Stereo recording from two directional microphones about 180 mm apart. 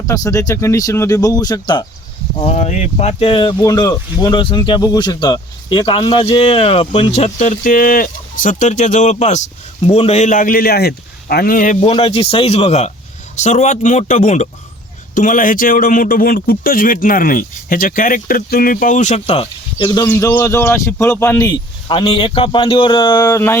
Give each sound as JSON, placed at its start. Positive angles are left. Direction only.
{"t": 0.1, "sound": "speech", "side_deg": 20}
{"t": 2.4, "sound": "speech", "side_deg": 40}
{"t": 11.8, "sound": "speech", "side_deg": 35}
{"t": 20.1, "sound": "speech", "side_deg": 15}